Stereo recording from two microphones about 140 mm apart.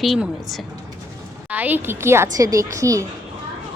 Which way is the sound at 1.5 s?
10° right (ahead or behind).